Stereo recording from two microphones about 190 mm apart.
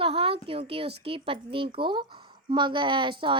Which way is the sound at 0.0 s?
30° right (ahead or behind).